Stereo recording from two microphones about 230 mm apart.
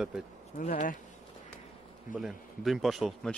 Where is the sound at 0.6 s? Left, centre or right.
Left.